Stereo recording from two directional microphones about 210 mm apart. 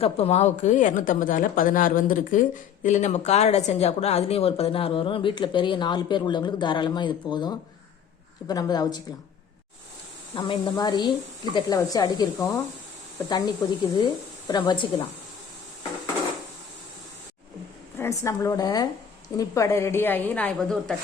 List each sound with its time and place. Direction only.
0.0 s a woman's voice: 30° left (ahead or behind)
10.3 s a woman's voice: 25° left (ahead or behind)
17.9 s a woman's voice: 10° left (ahead or behind)